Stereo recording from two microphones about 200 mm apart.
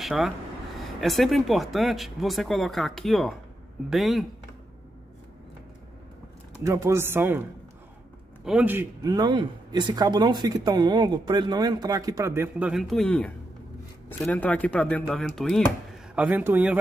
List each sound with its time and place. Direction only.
0.0 s speech: centre (ahead or behind)
6.6 s speech: 15° right (ahead or behind)
8.5 s speech: 5° right (ahead or behind)